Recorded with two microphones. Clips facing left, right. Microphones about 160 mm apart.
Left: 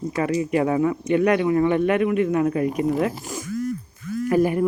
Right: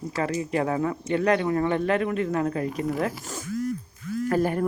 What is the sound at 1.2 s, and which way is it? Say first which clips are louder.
Speech: left 3 dB; 30° right (ahead or behind).